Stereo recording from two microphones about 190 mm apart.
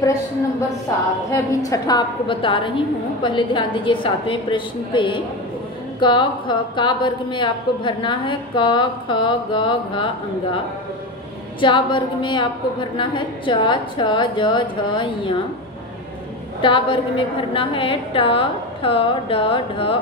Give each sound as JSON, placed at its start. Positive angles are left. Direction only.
{"t": 1.3, "sound": "a woman's voice", "side_deg": 15}
{"t": 11.6, "sound": "a woman's voice", "side_deg": 25}
{"t": 16.6, "sound": "a woman's voice", "side_deg": 25}